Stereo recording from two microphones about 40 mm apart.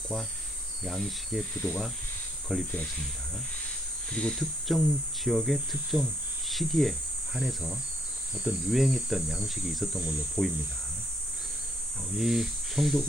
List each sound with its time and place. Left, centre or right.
0.9 s speech: centre
4.1 s speech: left
4.4 s speech: centre
10.4 s speech: centre
12.1 s speech: centre